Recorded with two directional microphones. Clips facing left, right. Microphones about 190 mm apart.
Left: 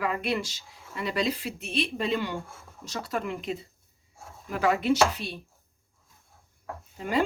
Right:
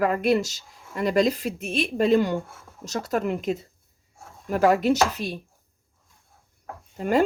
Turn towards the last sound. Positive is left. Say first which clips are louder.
# right 6 dB
turn(degrees=-45)  # may be behind; listen again after turning